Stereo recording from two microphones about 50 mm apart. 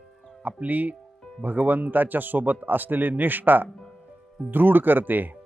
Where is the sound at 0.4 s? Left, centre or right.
Right.